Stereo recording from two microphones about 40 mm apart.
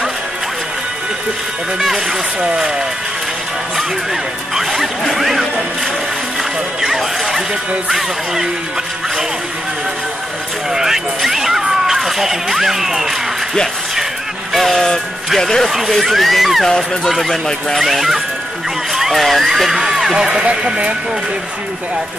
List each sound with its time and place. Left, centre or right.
2.4 s speech: centre
3.7 s speech: centre
10.7 s speech: centre
14.5 s speech: centre
16.6 s speech: centre
17.7 s speech: centre